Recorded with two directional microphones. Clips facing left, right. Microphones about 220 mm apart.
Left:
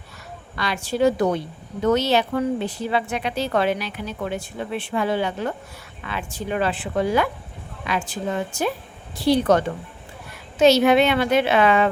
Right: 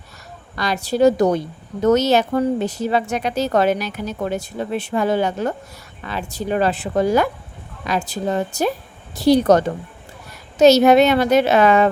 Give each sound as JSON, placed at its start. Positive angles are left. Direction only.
{"t": 0.5, "sound": "a woman's voice", "side_deg": -40}